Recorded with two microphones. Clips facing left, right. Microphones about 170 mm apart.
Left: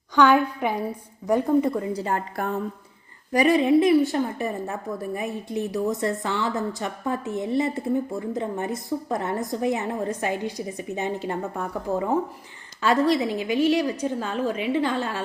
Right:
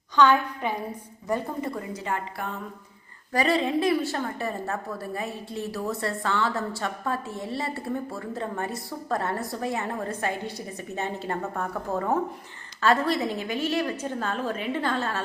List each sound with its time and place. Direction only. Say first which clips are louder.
0.2 s a woman's voice: left 3 dB; 10° left (ahead or behind)
1.8 s a woman's voice: left 5 dB; 35° left (ahead or behind)
3.3 s a woman's voice: left 6 dB; 15° left (ahead or behind)
12.8 s a woman's voice: left 3 dB; 15° left (ahead or behind)